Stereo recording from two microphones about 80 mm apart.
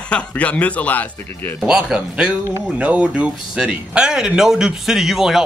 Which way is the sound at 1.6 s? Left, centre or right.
Centre.